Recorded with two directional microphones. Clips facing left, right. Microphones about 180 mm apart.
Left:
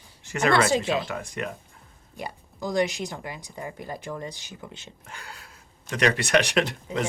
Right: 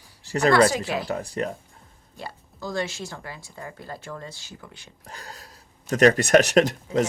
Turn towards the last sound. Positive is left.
turn(degrees=-40)  # may be behind; listen again after turning